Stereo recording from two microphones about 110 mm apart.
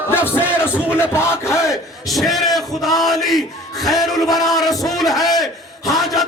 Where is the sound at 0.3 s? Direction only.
20° left (ahead or behind).